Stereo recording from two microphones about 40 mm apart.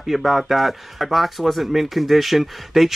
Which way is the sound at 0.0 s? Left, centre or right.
Centre.